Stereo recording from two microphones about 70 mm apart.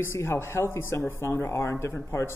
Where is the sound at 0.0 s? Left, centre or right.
Left.